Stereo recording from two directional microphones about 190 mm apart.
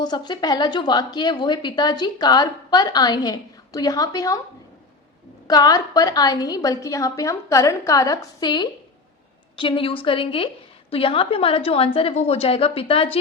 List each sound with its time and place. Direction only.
0.0 s a woman's voice: 20° left (ahead or behind)
5.5 s a woman's voice: 20° left (ahead or behind)